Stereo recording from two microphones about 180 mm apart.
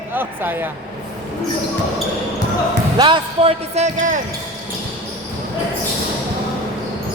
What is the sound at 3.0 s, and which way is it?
Speech, 30° right (ahead or behind).